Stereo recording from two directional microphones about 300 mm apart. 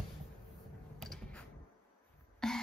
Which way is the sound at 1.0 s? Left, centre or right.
Centre.